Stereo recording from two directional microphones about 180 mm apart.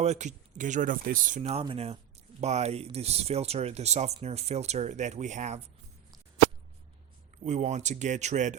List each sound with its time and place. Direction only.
0.0 s speech: 40° right (ahead or behind)
7.4 s speech: 40° right (ahead or behind)